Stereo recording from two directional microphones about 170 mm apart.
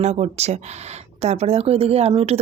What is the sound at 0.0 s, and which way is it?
Speech, 40° right (ahead or behind).